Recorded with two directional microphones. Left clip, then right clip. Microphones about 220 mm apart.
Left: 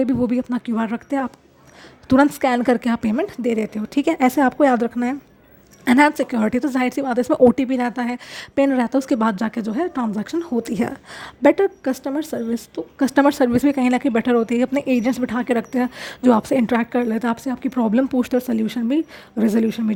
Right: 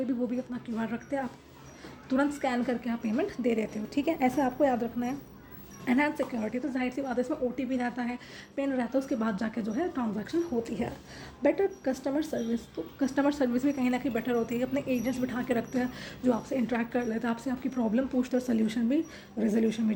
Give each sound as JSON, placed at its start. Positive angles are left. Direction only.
{"t": 0.0, "sound": "speech", "side_deg": 45}